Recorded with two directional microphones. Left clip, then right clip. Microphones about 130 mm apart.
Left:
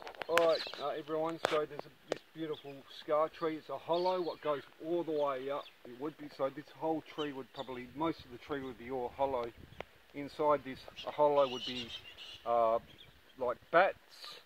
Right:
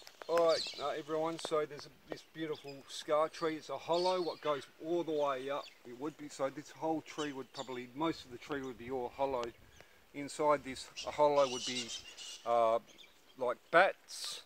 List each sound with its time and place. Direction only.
0.3 s speech: 10° left (ahead or behind)
11.1 s speech: 5° left (ahead or behind)
11.6 s speech: 90° right
12.4 s speech: centre (ahead or behind)